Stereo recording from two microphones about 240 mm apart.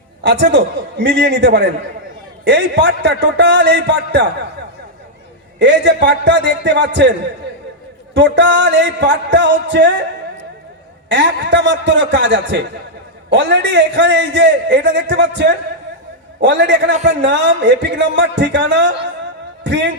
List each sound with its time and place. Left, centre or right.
0.2 s music: right
5.5 s music: right
8.1 s music: right